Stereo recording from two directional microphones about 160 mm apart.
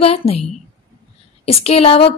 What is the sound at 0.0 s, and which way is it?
Speech, 40° left (ahead or behind).